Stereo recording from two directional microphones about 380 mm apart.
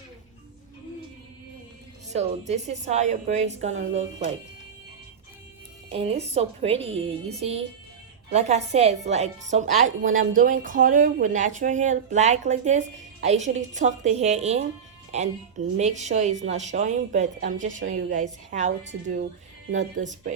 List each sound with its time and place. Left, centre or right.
2.5 s a woman's voice: centre
5.9 s a woman's voice: centre